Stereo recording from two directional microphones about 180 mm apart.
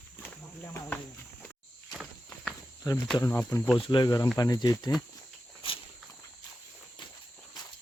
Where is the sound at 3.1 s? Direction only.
15° left (ahead or behind).